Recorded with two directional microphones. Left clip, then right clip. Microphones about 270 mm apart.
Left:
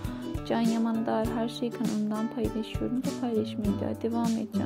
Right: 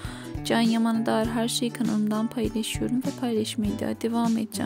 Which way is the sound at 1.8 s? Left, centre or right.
Centre.